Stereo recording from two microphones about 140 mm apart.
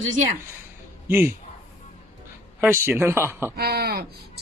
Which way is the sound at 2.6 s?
15° right (ahead or behind).